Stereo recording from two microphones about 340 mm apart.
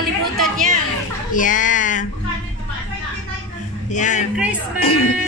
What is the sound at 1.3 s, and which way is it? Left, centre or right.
Speech, left.